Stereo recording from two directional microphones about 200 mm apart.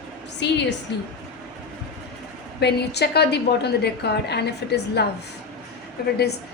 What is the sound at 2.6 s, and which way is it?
A woman's voice, 55° left (ahead or behind).